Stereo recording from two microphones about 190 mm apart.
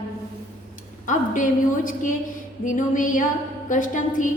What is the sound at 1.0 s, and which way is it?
A woman's voice, 45° left (ahead or behind).